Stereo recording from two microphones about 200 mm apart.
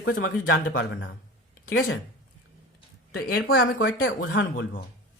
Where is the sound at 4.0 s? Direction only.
70° left (ahead or behind).